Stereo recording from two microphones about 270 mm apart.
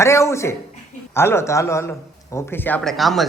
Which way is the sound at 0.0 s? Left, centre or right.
Centre.